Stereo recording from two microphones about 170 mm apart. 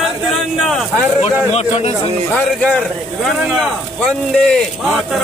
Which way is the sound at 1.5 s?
40° left (ahead or behind).